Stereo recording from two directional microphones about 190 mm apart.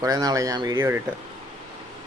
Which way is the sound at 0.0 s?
20° right (ahead or behind).